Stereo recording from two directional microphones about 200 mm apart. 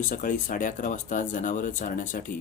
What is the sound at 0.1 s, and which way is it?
Speech, 40° left (ahead or behind).